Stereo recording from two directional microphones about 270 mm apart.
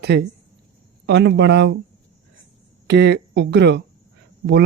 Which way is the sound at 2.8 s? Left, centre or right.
Right.